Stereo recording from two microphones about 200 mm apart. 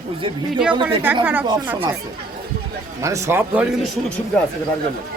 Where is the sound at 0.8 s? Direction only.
25° right (ahead or behind).